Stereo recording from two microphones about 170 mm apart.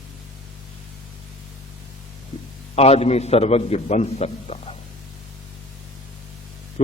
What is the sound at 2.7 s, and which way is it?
A man's voice, 35° left (ahead or behind).